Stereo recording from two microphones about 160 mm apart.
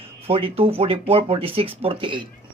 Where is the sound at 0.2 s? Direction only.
35° right (ahead or behind).